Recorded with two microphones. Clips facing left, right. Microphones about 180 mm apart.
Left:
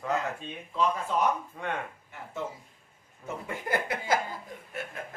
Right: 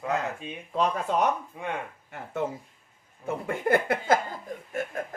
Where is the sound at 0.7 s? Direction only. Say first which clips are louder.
Right 2 dB; 60° right (ahead or behind).